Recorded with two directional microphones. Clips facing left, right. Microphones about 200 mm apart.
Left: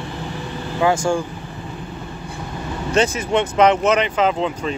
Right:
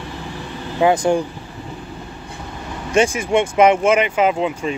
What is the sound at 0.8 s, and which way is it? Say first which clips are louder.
Speech: right 3 dB; 20° right (ahead or behind).